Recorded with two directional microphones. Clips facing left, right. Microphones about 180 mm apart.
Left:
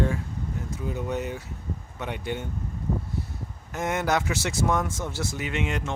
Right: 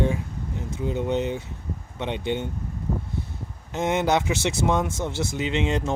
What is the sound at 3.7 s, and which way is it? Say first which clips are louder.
Speech: right 4 dB; 25° right (ahead or behind).